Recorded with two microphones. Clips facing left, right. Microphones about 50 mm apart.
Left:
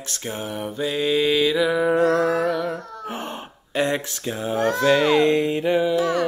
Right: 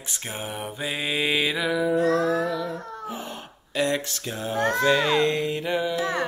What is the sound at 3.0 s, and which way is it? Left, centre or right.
Wail, left.